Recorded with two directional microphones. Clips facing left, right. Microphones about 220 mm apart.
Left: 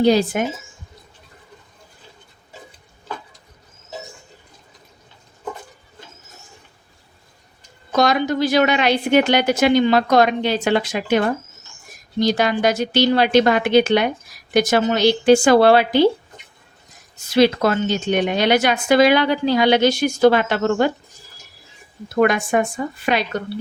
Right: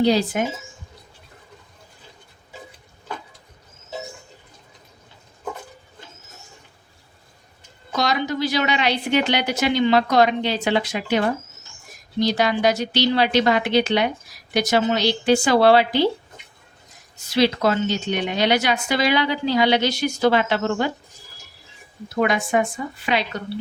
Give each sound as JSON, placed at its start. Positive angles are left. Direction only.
{"t": 0.0, "sound": "a woman's voice", "side_deg": 50}
{"t": 7.9, "sound": "a woman's voice", "side_deg": 50}
{"t": 17.2, "sound": "a woman's voice", "side_deg": 50}
{"t": 22.1, "sound": "a woman's voice", "side_deg": 50}